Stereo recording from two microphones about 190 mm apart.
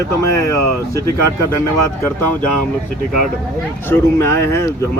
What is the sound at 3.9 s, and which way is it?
Speech, 15° left (ahead or behind).